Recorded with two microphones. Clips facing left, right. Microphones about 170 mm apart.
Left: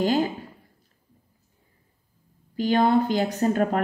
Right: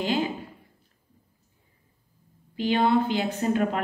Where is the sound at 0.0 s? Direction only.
40° left (ahead or behind).